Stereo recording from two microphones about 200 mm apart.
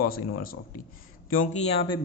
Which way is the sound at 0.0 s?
45° left (ahead or behind).